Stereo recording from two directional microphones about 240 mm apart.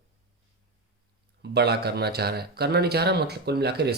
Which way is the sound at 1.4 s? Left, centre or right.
Right.